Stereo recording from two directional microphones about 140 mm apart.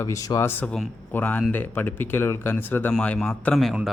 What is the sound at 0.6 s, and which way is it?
Speech, 15° left (ahead or behind).